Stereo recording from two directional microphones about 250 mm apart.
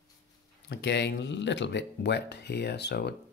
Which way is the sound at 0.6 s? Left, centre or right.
Left.